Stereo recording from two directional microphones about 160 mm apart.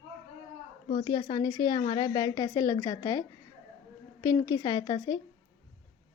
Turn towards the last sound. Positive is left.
turn(degrees=25)  # may be behind; listen again after turning